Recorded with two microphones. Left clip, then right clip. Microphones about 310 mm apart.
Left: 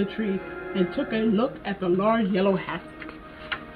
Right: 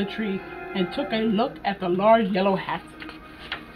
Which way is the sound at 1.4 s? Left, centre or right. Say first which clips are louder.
Right 2 dB; centre.